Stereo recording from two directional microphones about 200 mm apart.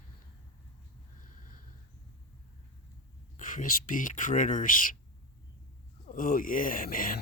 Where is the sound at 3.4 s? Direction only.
40° left (ahead or behind).